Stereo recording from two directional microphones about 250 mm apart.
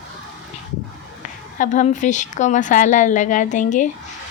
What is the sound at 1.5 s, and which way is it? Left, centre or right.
A woman's voice, left.